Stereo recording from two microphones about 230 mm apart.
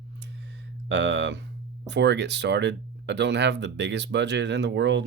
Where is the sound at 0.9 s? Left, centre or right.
Right.